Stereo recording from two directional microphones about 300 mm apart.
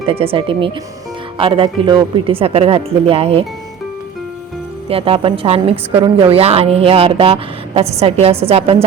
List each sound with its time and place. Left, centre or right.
0.1 s a woman's voice: centre
4.9 s a woman's voice: centre